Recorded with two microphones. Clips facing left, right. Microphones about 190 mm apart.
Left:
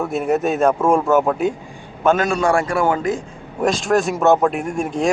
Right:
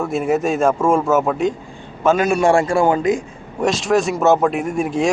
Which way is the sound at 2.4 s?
25° right (ahead or behind).